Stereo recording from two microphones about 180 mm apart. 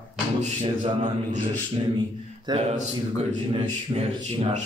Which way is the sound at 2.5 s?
35° right (ahead or behind).